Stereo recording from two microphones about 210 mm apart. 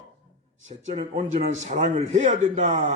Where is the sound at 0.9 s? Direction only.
35° right (ahead or behind).